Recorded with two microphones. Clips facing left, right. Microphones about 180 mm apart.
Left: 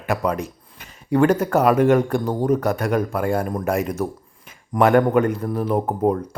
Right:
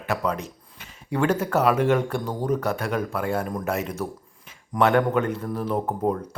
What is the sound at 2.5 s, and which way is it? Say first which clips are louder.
Speech: left 5 dB; 45° left (ahead or behind).